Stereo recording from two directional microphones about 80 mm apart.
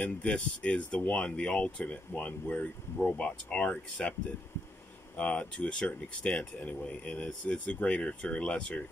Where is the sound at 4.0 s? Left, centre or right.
Centre.